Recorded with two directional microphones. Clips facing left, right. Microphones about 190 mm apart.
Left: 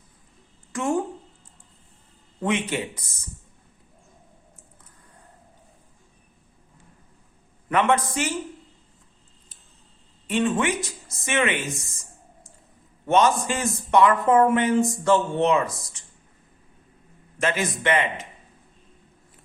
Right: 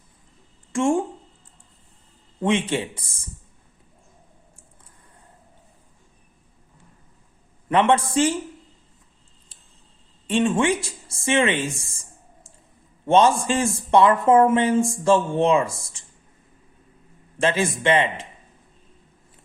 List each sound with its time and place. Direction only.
0.7 s speech: 25° right (ahead or behind)
2.4 s speech: 25° right (ahead or behind)
7.7 s speech: 30° right (ahead or behind)
10.2 s speech: 30° right (ahead or behind)
13.1 s speech: 30° right (ahead or behind)
17.3 s speech: 30° right (ahead or behind)